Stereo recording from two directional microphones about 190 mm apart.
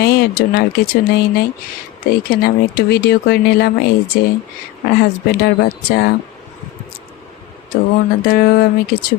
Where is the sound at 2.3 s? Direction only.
55° left (ahead or behind).